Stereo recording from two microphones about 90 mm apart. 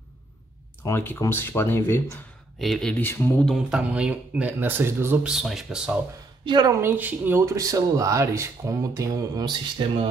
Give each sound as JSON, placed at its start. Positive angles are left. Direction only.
{"t": 0.8, "sound": "speech", "side_deg": 25}
{"t": 2.6, "sound": "speech", "side_deg": 5}
{"t": 3.0, "sound": "speech", "side_deg": 25}
{"t": 3.4, "sound": "speech", "side_deg": -5}
{"t": 5.2, "sound": "speech", "side_deg": -5}
{"t": 6.4, "sound": "speech", "side_deg": -60}
{"t": 6.7, "sound": "speech", "side_deg": -25}